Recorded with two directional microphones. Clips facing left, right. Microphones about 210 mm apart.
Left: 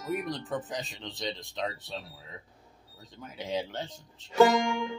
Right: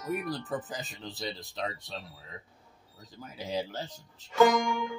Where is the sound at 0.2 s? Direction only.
5° right (ahead or behind).